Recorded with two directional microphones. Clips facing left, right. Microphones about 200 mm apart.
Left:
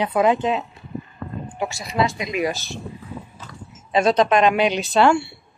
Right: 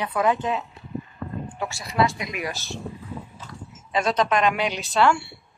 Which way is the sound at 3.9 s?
20° left (ahead or behind).